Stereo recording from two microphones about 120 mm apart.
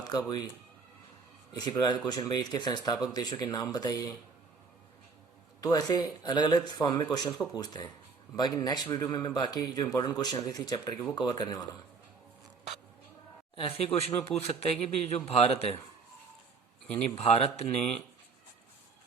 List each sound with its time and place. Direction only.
0.0 s speech: 35° left (ahead or behind)
1.5 s a man's voice: 35° left (ahead or behind)
5.5 s a man's voice: 30° left (ahead or behind)
13.6 s speech: 55° left (ahead or behind)
17.2 s speech: 60° left (ahead or behind)
17.7 s speech: 10° left (ahead or behind)